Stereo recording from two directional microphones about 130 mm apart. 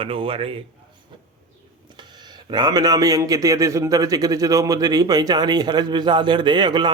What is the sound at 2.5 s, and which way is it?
A man's voice, 35° right (ahead or behind).